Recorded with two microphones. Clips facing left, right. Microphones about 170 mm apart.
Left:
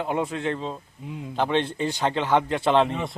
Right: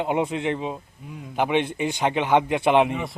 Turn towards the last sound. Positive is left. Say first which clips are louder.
# right 2 dB
turn(degrees=-15)  # may be behind; listen again after turning